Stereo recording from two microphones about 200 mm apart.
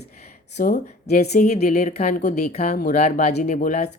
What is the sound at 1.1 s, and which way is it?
Speech, 35° left (ahead or behind).